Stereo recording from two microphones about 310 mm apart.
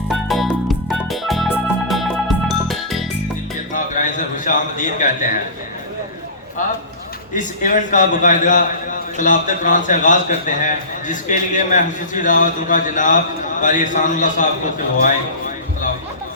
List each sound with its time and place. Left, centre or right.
0.1 s music: centre
3.7 s a sound: left
7.3 s a man's voice: left